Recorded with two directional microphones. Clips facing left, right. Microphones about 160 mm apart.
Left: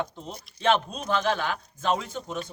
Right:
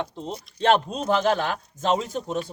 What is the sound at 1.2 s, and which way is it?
A man's voice, 40° right (ahead or behind).